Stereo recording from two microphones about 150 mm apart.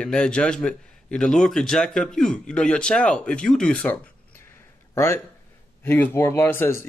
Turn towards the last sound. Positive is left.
turn(degrees=15)  # may be behind; listen again after turning